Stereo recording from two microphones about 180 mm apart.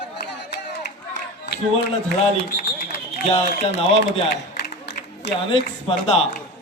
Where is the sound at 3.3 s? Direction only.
30° left (ahead or behind).